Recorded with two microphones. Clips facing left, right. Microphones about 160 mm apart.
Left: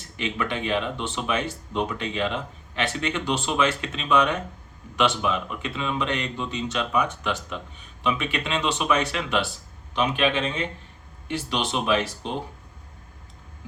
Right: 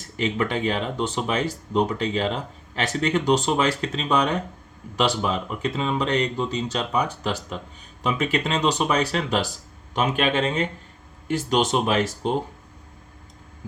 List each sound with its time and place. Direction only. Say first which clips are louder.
0.0 s speech: right 4 dB; 40° right (ahead or behind)